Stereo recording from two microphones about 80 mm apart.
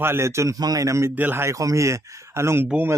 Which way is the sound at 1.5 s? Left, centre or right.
Right.